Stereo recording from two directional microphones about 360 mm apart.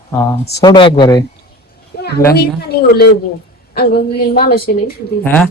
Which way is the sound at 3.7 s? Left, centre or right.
Left.